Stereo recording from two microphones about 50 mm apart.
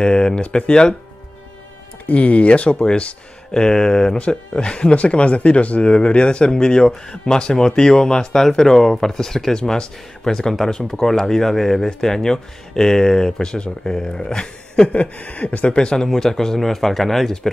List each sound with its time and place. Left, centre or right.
0.0 s speech: centre
2.0 s speech: left
15.0 s speech: left; by 17.5 s centre